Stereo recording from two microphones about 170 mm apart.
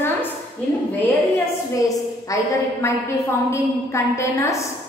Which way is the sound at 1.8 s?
20° left (ahead or behind).